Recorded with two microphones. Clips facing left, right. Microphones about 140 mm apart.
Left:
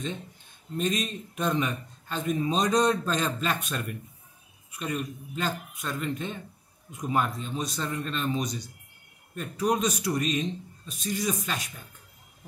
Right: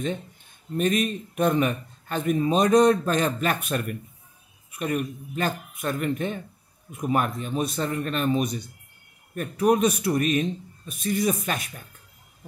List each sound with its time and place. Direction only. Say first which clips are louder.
0.7 s a man's voice: right 5 dB; 60° right (ahead or behind)